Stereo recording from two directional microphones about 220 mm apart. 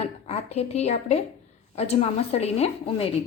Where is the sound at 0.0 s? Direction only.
30° left (ahead or behind).